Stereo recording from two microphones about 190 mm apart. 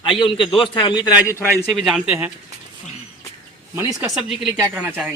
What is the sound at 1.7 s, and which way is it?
Speech, centre (ahead or behind).